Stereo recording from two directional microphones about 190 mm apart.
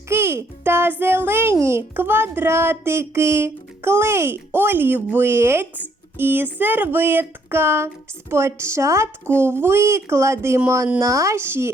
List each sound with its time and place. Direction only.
0.1 s a child's voice: 15° right (ahead or behind)